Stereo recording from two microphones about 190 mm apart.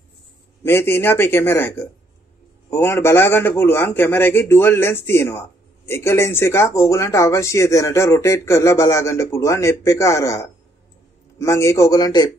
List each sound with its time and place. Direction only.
0.7 s speech: 15° left (ahead or behind)